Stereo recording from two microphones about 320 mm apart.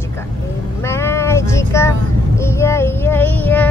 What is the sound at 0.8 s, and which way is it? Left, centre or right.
Child singing, centre.